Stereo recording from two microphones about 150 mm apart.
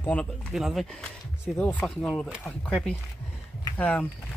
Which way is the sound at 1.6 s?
10° left (ahead or behind).